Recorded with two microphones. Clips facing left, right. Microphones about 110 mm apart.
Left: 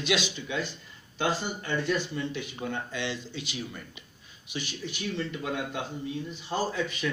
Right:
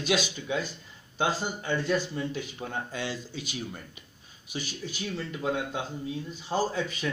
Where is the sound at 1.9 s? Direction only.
35° right (ahead or behind).